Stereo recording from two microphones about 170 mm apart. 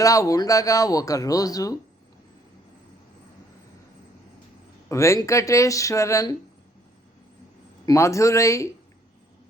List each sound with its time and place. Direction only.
0.0 s speech: 20° left (ahead or behind)
4.9 s speech: 15° left (ahead or behind)
7.9 s speech: 15° left (ahead or behind)